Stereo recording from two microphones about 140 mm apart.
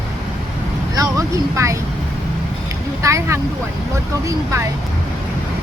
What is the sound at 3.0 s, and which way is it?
Vehicle, 20° right (ahead or behind).